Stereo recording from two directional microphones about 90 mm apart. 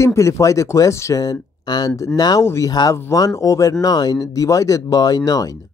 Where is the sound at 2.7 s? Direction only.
50° left (ahead or behind).